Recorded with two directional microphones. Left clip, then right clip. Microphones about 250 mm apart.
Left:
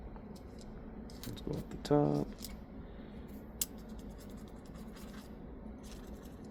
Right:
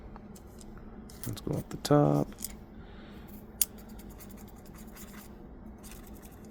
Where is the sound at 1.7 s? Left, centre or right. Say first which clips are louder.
Right 6 dB; right.